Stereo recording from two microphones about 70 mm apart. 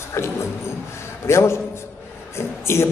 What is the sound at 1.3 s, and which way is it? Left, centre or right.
Speech, left.